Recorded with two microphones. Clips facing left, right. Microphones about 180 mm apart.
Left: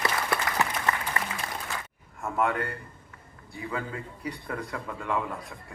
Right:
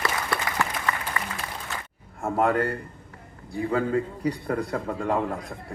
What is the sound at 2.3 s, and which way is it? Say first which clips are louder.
A man's voice: right 5 dB; 30° right (ahead or behind).